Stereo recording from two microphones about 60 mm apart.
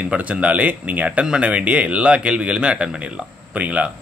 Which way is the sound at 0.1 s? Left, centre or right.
Right.